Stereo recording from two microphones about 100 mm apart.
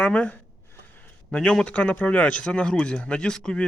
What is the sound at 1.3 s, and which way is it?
Speech, 10° left (ahead or behind).